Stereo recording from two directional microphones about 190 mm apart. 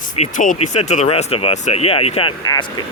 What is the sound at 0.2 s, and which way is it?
Speech, 40° left (ahead or behind).